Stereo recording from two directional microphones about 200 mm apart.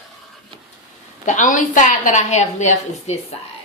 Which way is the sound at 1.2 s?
40° left (ahead or behind).